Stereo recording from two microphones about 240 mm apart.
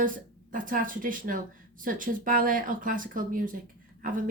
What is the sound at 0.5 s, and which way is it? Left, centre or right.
A woman's voice, right.